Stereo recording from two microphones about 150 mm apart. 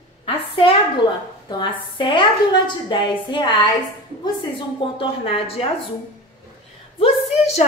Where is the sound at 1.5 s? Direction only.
30° left (ahead or behind).